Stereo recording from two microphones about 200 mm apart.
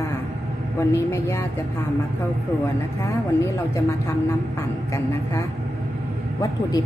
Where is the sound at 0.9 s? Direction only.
15° left (ahead or behind).